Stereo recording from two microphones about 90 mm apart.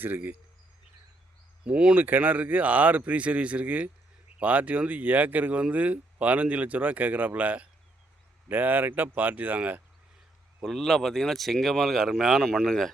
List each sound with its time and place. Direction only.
0.0 s speech: 25° right (ahead or behind)
1.6 s speech: 10° right (ahead or behind)
10.6 s speech: 5° left (ahead or behind)